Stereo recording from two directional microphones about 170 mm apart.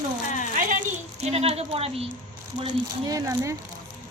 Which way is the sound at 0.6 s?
50° right (ahead or behind).